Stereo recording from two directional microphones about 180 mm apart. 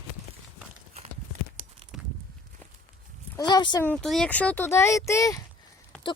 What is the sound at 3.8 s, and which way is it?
Speech, 5° left (ahead or behind).